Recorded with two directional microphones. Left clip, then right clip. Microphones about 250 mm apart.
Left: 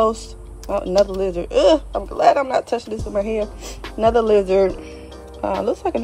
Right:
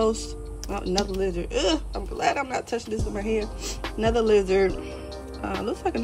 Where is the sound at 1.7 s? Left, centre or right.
Left.